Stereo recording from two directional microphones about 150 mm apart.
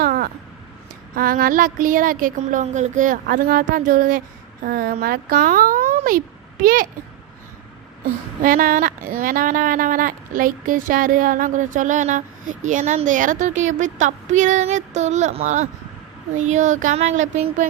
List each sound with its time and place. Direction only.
0.0 s a sound: 70° right (ahead or behind)
1.1 s speech: 70° right (ahead or behind)
4.6 s speech: 75° right (ahead or behind)
8.4 s speech: 65° right (ahead or behind)